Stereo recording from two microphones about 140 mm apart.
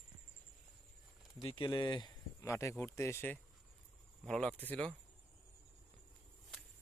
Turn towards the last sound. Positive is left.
turn(degrees=10)  # may be behind; listen again after turning